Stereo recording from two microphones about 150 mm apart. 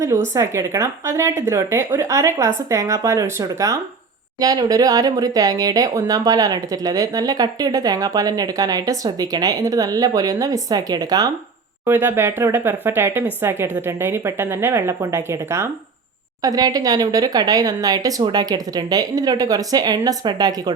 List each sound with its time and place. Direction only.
0.0 s speech: 20° right (ahead or behind)
11.9 s speech: 15° right (ahead or behind)